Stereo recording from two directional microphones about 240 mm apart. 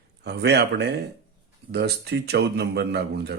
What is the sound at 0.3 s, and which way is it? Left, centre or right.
Speech, right.